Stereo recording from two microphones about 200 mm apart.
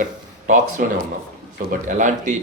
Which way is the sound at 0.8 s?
45° right (ahead or behind).